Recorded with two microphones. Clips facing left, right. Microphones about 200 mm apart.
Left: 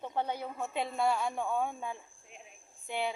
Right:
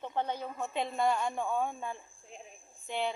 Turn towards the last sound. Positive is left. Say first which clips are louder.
# right 1 dB
turn(degrees=10)  # may be behind; listen again after turning